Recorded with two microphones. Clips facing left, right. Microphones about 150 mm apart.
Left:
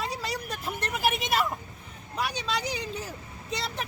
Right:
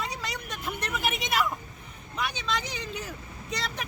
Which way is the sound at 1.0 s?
5° left (ahead or behind).